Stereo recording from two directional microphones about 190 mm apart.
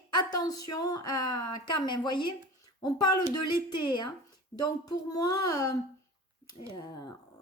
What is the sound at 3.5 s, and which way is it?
A woman's voice, 25° left (ahead or behind).